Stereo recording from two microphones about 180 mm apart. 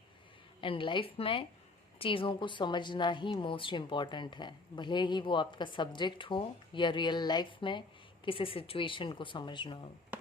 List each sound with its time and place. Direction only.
0.6 s a woman's voice: 30° left (ahead or behind)